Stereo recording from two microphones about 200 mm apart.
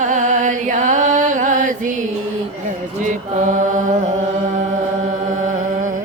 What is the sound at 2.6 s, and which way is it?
Mantra, 40° right (ahead or behind).